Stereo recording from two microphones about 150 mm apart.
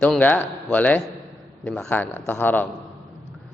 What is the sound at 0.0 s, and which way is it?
A man's voice, 10° left (ahead or behind).